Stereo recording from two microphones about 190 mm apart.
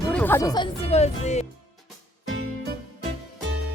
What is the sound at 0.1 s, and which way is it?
Speech, 10° left (ahead or behind).